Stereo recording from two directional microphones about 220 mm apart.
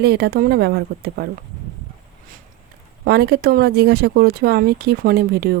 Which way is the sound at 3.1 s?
45° right (ahead or behind).